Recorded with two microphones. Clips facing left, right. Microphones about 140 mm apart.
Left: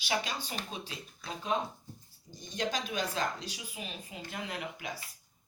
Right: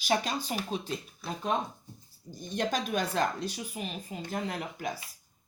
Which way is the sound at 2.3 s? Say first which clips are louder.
Right 4 dB; 50° right (ahead or behind).